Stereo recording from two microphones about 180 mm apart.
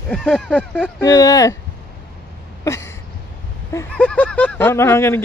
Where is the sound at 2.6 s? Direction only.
15° left (ahead or behind).